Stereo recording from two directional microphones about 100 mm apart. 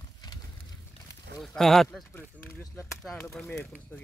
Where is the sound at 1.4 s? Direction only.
Centre (ahead or behind).